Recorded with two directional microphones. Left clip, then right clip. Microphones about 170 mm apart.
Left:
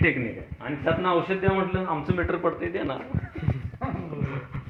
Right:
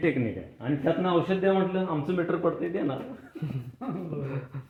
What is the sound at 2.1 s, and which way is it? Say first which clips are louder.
Speech: right 1 dB; 60° right (ahead or behind).